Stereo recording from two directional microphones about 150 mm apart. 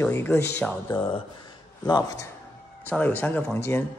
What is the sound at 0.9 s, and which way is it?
Speech, 30° left (ahead or behind).